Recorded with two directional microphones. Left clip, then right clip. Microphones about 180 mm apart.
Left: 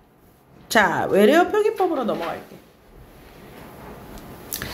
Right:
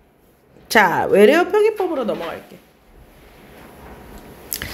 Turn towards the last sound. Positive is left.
turn(degrees=-35)  # may be behind; listen again after turning